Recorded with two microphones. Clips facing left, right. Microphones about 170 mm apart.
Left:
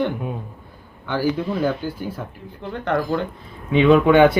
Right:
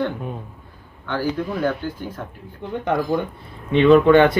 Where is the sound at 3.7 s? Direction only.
5° left (ahead or behind).